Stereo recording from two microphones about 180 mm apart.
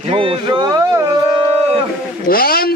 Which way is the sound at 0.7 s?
20° right (ahead or behind).